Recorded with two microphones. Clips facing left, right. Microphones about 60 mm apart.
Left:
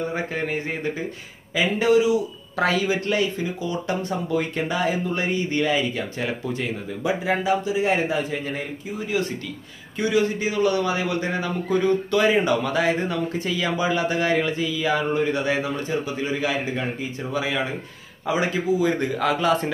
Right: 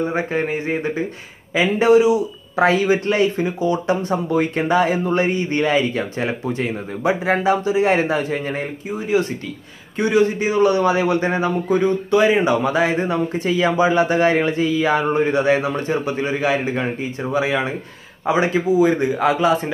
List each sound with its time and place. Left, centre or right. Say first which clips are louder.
0.1 s a man's voice: right 5 dB; right
18.9 s a man's voice: right 5 dB; centre